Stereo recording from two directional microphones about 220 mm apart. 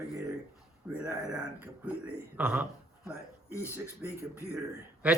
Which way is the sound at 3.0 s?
15° left (ahead or behind).